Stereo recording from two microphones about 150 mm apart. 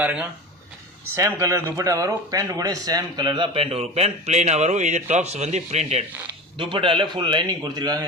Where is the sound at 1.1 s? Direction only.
20° right (ahead or behind); by 6.1 s 45° right (ahead or behind).